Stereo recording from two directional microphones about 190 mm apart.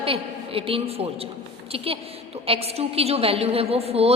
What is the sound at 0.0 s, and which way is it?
A man's voice, 30° right (ahead or behind).